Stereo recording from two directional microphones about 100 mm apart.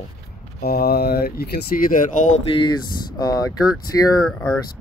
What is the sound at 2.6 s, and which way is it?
Speech, 45° left (ahead or behind).